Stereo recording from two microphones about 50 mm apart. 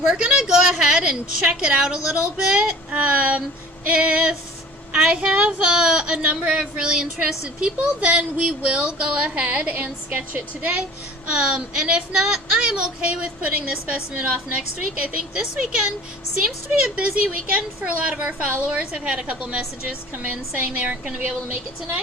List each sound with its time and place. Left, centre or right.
0.1 s a woman's voice: centre; by 10.7 s right
11.3 s speech: centre